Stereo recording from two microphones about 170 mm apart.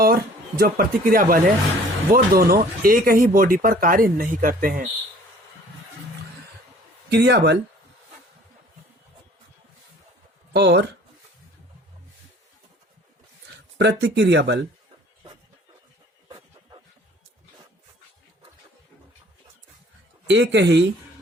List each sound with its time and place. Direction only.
0.0 s speech: 60° right (ahead or behind)
7.1 s speech: 80° right
10.5 s speech: 90° right
13.7 s speech: 90° right
16.3 s a sound: 25° right (ahead or behind)
20.2 s speech: 90° right